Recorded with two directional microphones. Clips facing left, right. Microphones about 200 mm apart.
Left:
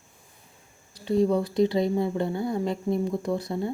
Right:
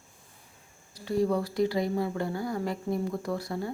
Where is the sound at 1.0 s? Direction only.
20° left (ahead or behind).